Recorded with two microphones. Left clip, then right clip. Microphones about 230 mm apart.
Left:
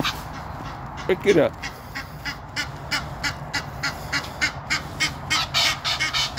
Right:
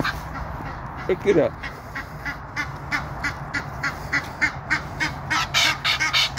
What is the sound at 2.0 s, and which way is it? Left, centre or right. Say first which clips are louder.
Goose: right 2 dB; left.